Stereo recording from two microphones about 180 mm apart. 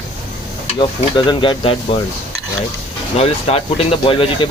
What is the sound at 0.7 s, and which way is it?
Speech, 25° left (ahead or behind).